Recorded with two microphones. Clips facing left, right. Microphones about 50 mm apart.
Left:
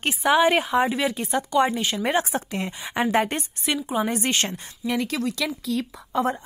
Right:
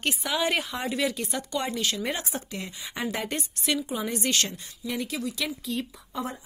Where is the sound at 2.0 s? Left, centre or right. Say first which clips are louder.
Left 8 dB; left.